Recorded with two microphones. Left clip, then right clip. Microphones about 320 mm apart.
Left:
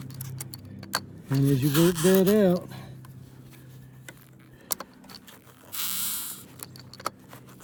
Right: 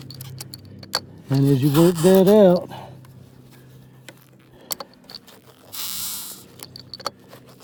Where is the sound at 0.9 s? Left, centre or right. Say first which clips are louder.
Right 5 dB; centre.